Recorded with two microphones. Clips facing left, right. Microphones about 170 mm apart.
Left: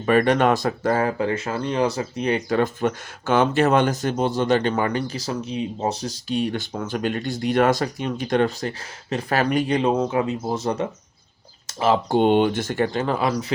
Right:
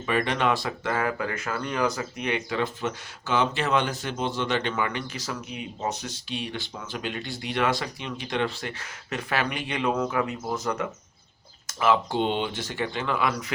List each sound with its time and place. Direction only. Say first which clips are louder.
0.0 s speech: left 8 dB; 50° left (ahead or behind); by 10.8 s 30° left (ahead or behind)
12.0 s speech: left 9 dB; 50° left (ahead or behind); by 13.4 s 35° left (ahead or behind)